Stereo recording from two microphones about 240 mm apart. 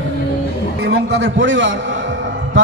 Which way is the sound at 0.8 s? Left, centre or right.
Right.